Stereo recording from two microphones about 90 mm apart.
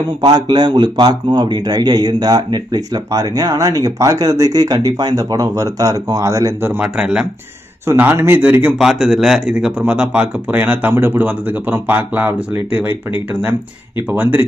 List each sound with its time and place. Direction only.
0.2 s speech: 55° right (ahead or behind); by 6.7 s 35° right (ahead or behind)
7.0 s speech: 10° right (ahead or behind)
7.8 s a man's voice: 25° right (ahead or behind)
8.7 s a man's voice: 5° right (ahead or behind); by 14.4 s 20° right (ahead or behind)